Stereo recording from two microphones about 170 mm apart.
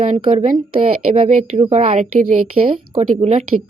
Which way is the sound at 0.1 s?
35° right (ahead or behind).